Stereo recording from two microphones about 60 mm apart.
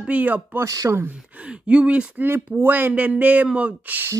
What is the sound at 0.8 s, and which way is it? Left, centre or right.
Speech, right.